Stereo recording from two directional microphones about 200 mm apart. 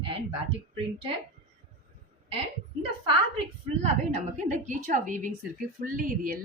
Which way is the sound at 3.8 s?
35° right (ahead or behind).